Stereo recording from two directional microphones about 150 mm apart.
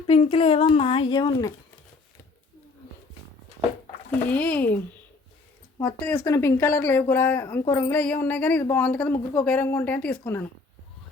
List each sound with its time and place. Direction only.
0.1 s speech: 40° left (ahead or behind)
4.3 s speech: 10° left (ahead or behind)
5.8 s speech: 10° left (ahead or behind)